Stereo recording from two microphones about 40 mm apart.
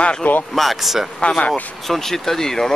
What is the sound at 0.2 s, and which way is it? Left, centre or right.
Speech, left.